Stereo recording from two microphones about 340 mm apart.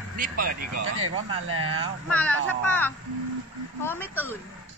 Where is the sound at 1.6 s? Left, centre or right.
Centre.